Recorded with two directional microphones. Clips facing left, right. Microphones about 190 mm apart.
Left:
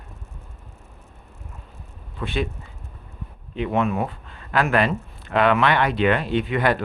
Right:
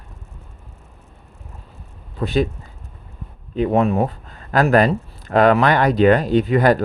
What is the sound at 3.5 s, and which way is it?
Speech, 40° right (ahead or behind).